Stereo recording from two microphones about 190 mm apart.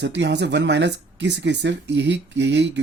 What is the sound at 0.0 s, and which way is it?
Speech, 65° right (ahead or behind).